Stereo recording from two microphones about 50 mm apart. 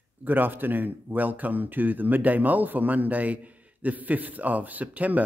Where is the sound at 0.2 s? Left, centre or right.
Right.